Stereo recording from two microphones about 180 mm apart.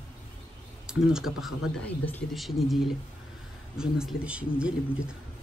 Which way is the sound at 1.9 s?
10° left (ahead or behind).